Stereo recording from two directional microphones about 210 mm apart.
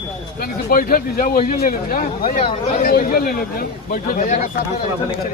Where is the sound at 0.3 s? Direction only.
45° left (ahead or behind).